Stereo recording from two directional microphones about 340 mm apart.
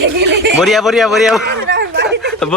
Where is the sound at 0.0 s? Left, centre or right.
Right.